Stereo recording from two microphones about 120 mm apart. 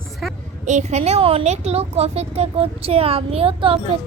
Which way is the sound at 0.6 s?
80° right.